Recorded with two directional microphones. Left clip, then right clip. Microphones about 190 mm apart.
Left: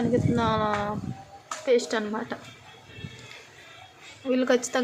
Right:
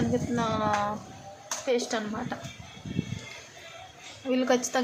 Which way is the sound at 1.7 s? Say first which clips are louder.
Left 5 dB; 20° left (ahead or behind).